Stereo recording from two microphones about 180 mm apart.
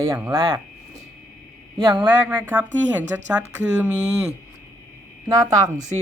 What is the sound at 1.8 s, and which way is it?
Speech, 25° right (ahead or behind).